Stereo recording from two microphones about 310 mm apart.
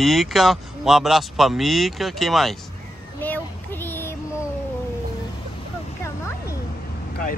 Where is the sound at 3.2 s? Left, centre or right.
Centre.